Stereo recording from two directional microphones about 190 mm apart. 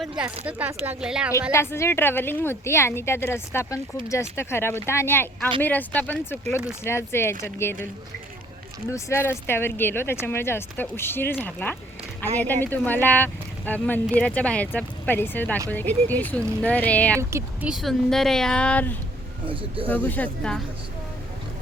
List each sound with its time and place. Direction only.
0.0 s speech: 5° right (ahead or behind)
1.5 s speech: 15° left (ahead or behind)
8.9 s speech: 15° left (ahead or behind)
17.2 s speech: 15° right (ahead or behind)
17.7 s a woman's voice: centre (ahead or behind)
19.5 s speech: 30° right (ahead or behind)
19.9 s speech: 10° left (ahead or behind)